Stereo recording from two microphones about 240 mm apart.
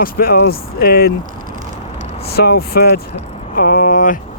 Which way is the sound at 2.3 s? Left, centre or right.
Left.